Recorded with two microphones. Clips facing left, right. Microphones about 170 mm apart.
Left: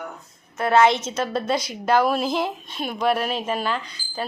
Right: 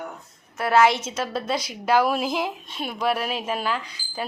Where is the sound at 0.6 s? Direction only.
5° right (ahead or behind).